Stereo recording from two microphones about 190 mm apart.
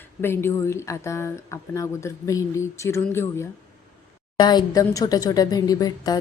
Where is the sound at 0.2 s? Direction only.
10° left (ahead or behind).